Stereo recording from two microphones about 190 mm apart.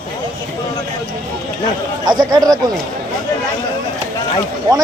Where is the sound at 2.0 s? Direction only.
25° right (ahead or behind).